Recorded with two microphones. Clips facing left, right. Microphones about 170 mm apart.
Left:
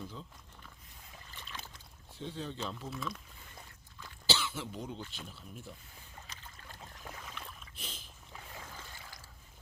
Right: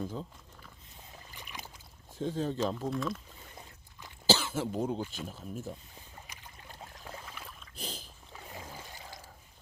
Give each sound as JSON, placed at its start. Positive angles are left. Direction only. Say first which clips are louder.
{"t": 0.0, "sound": "speech", "louder": "right 8 dB", "side_deg": -45}
{"t": 1.3, "sound": "boat", "louder": "right 1 dB", "side_deg": -15}
{"t": 2.1, "sound": "speech", "louder": "right 8 dB", "side_deg": -40}
{"t": 2.9, "sound": "speech", "louder": "right 7 dB", "side_deg": 0}
{"t": 4.3, "sound": "speech", "louder": "right 7 dB", "side_deg": -45}
{"t": 6.2, "sound": "boat", "louder": "right 1 dB", "side_deg": -15}
{"t": 7.3, "sound": "boat", "louder": "even", "side_deg": -5}
{"t": 7.8, "sound": "boat", "louder": "right 9 dB", "side_deg": -35}
{"t": 8.3, "sound": "boat", "louder": "right 3 dB", "side_deg": -25}
{"t": 8.7, "sound": "a sound", "louder": "right 4 dB", "side_deg": -20}